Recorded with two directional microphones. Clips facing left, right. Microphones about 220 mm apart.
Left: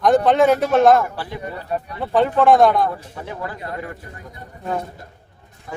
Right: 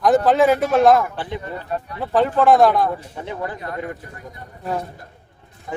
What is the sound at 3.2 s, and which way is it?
Speech, 20° right (ahead or behind).